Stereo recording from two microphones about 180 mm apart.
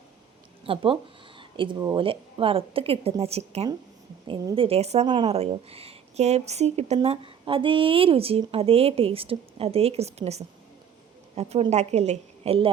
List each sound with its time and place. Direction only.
0.6 s speech: 30° right (ahead or behind)